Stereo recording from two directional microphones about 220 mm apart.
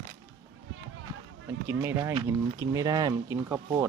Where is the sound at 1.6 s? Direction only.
10° right (ahead or behind).